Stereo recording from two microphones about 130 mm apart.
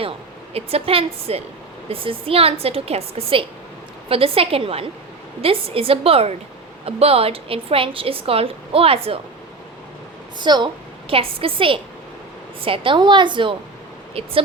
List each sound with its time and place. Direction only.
0.5 s a woman's voice: 50° right (ahead or behind)
10.4 s a woman's voice: 35° right (ahead or behind)